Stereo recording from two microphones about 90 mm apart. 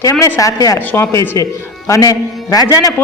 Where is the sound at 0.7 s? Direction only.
25° left (ahead or behind).